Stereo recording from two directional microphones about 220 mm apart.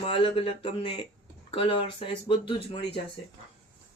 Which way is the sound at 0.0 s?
25° left (ahead or behind).